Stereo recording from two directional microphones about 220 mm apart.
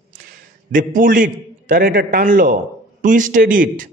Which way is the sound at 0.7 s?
35° right (ahead or behind).